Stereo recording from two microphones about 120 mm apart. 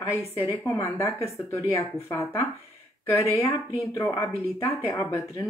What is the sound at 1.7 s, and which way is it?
Speech, 25° left (ahead or behind).